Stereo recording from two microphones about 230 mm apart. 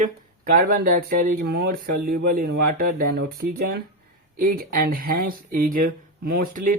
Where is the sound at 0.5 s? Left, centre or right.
Right.